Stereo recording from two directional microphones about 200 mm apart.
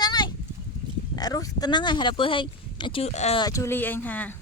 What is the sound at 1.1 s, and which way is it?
Speech, 20° left (ahead or behind).